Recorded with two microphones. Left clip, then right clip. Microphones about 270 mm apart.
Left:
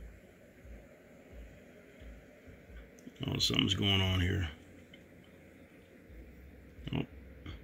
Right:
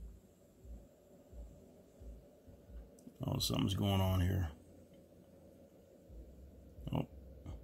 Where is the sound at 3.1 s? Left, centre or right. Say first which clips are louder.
Left 7 dB; centre.